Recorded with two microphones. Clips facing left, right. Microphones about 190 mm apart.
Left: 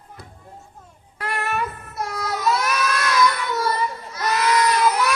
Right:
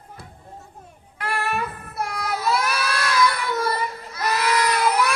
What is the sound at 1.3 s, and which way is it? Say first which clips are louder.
Child singing: even; 30° right (ahead or behind).